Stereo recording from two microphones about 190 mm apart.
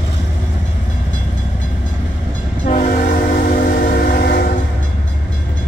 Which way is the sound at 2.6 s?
40° left (ahead or behind).